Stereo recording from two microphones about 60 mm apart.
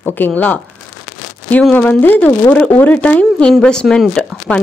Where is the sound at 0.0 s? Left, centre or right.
Left.